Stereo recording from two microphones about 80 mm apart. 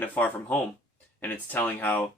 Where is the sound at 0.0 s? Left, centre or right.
Left.